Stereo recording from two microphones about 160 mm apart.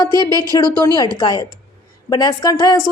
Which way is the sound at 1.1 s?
25° left (ahead or behind).